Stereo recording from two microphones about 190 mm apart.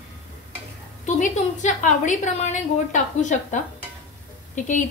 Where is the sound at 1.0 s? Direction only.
40° left (ahead or behind).